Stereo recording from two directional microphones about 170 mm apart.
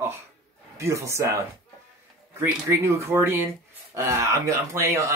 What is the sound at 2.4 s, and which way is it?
Speech, 15° right (ahead or behind).